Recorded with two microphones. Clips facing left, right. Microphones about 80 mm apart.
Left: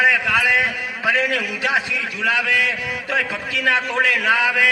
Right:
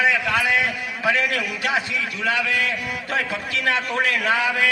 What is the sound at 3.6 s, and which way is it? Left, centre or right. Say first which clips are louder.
A man's voice: left 3 dB; centre.